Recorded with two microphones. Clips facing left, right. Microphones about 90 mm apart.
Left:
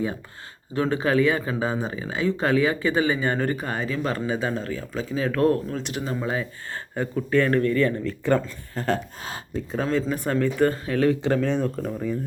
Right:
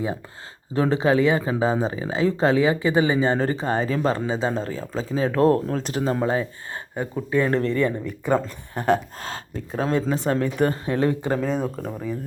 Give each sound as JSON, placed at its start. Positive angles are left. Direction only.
{"t": 0.7, "sound": "speech", "side_deg": -30}
{"t": 6.9, "sound": "speech", "side_deg": -15}
{"t": 11.2, "sound": "speech", "side_deg": -15}